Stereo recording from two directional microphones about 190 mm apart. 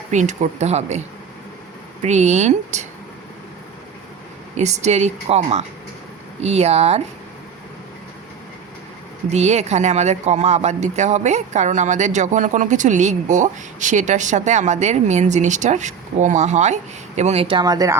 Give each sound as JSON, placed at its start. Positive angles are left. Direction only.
{"t": 0.1, "sound": "speech", "side_deg": -40}
{"t": 2.0, "sound": "speech", "side_deg": -35}
{"t": 4.5, "sound": "speech", "side_deg": -35}
{"t": 9.3, "sound": "speech", "side_deg": -35}